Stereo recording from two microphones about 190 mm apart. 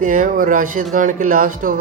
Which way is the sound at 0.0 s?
45° right (ahead or behind).